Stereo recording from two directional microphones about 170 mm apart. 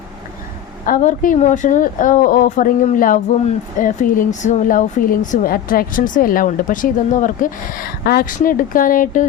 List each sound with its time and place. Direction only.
0.9 s speech: 55° left (ahead or behind)